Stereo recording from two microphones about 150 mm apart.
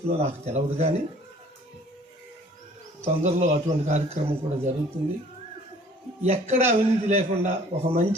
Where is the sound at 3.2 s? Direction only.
50° right (ahead or behind).